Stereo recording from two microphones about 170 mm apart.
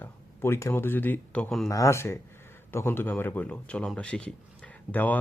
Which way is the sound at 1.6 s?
20° left (ahead or behind).